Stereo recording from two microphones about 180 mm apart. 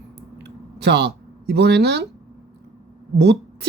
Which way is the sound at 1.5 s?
65° right (ahead or behind).